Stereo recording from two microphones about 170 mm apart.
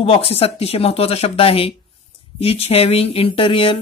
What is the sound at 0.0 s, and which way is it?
A woman's voice, 35° left (ahead or behind).